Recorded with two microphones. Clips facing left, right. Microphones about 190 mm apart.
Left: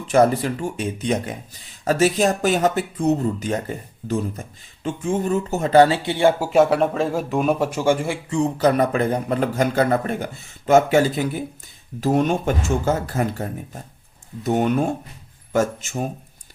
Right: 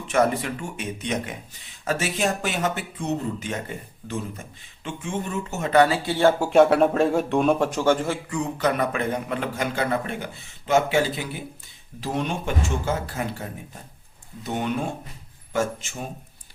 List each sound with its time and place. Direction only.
0.1 s speech: 35° left (ahead or behind); by 6.5 s 15° left (ahead or behind)
6.5 s speech: centre (ahead or behind)
8.3 s speech: 30° left (ahead or behind)